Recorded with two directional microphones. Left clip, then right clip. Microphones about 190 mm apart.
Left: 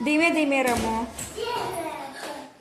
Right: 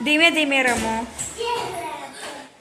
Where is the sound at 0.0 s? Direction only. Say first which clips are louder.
Right 5 dB; 5° left (ahead or behind).